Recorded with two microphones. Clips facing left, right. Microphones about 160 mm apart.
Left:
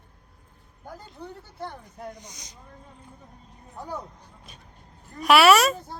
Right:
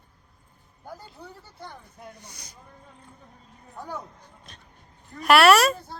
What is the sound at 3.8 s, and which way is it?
Speech, 10° left (ahead or behind).